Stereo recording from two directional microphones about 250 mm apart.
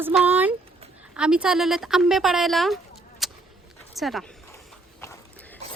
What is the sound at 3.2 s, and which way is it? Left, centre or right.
Vehicle, centre.